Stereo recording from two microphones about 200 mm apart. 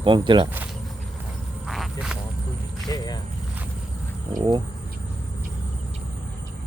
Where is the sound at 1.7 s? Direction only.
Centre (ahead or behind).